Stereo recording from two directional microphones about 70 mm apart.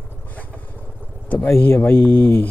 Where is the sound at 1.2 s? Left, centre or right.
Left.